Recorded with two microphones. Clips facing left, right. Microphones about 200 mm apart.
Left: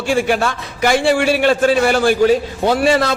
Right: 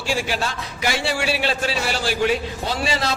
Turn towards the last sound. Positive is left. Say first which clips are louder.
# left 9 dB
turn(degrees=55)  # may be behind; listen again after turning